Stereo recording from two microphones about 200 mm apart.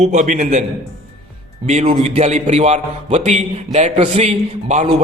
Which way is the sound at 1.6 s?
35° right (ahead or behind).